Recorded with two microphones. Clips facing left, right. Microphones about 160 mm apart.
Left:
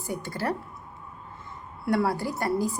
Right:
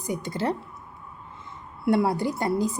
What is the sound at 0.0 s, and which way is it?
Speech, 20° right (ahead or behind).